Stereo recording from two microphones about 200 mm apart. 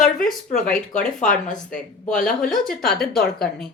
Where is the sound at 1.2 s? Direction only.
40° left (ahead or behind).